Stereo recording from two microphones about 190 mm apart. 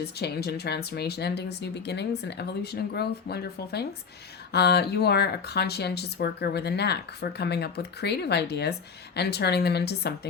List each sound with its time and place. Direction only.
0.2 s speech: 60° left (ahead or behind)